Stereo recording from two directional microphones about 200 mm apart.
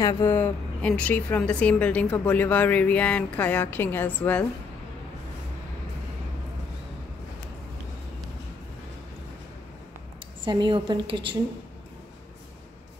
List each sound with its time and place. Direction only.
0.0 s a woman's voice: 15° left (ahead or behind)
10.4 s a woman's voice: 25° right (ahead or behind)